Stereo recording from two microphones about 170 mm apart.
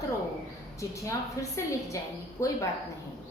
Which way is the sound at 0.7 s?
20° left (ahead or behind).